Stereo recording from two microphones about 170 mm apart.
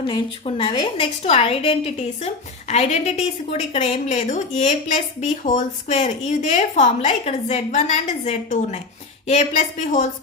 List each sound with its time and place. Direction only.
0.0 s a woman's voice: 30° left (ahead or behind)